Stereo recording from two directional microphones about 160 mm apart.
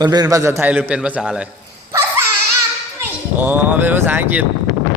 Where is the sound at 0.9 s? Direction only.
10° right (ahead or behind).